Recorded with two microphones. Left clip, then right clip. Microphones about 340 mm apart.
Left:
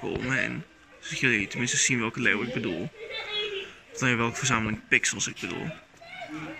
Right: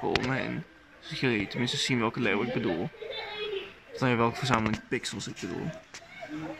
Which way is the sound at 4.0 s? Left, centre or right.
Centre.